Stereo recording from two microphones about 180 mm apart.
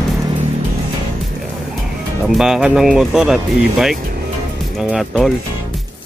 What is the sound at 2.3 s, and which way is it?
Speech, 5° right (ahead or behind).